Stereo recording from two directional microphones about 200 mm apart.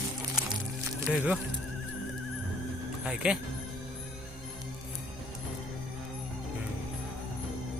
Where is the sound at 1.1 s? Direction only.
5° right (ahead or behind).